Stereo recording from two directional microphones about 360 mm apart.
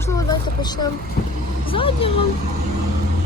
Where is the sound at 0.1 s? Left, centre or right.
Centre.